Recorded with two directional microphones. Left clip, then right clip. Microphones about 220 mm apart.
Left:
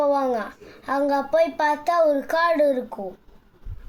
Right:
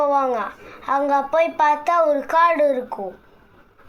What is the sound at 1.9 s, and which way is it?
A child's voice, 20° right (ahead or behind).